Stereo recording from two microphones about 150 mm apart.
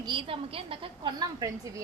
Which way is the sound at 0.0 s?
35° right (ahead or behind).